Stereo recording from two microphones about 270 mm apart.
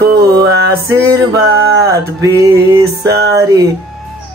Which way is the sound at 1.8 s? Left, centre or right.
Centre.